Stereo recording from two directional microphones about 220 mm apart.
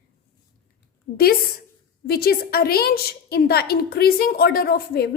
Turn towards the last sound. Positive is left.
turn(degrees=45)  # may be behind; listen again after turning